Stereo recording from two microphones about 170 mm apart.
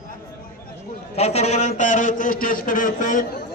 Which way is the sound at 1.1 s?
40° left (ahead or behind).